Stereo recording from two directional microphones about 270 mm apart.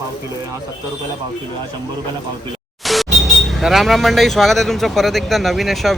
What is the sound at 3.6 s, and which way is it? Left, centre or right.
Speech, centre.